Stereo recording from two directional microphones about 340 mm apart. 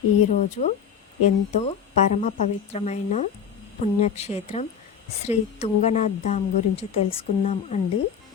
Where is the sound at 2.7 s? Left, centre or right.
Centre.